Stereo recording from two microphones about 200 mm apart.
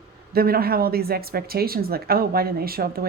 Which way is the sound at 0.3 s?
50° right (ahead or behind).